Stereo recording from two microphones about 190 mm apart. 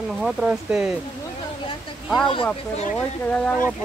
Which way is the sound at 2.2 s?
25° left (ahead or behind).